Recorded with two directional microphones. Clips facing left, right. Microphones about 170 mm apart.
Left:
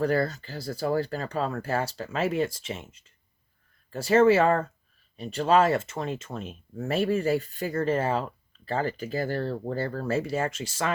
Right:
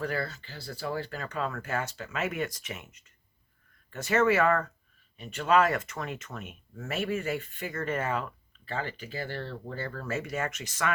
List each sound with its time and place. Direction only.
0.0 s speech: 40° left (ahead or behind)